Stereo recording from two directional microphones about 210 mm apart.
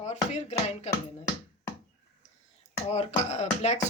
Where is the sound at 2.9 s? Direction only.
30° left (ahead or behind).